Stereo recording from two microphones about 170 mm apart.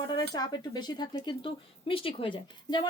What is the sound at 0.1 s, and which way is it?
Speech, 25° left (ahead or behind).